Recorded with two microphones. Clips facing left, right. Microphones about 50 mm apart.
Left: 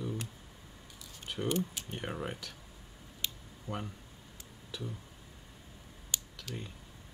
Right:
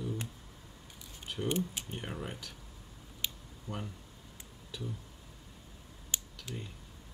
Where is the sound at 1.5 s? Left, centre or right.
Right.